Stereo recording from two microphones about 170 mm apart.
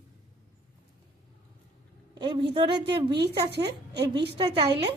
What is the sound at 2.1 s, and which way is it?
A woman's voice, 30° right (ahead or behind).